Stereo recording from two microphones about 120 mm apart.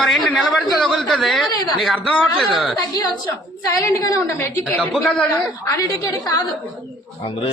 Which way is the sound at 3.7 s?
30° left (ahead or behind).